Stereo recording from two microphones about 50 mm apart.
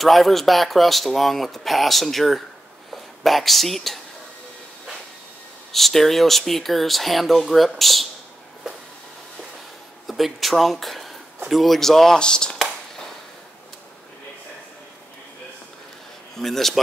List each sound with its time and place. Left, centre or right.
0.0 s speech: centre
5.7 s speech: centre
10.0 s speech: centre
16.3 s speech: centre